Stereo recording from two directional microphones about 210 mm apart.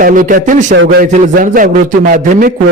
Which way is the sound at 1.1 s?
35° right (ahead or behind).